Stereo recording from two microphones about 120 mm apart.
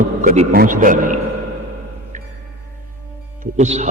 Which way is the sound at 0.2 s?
90° right.